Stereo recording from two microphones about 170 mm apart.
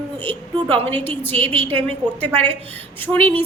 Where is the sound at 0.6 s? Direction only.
30° right (ahead or behind).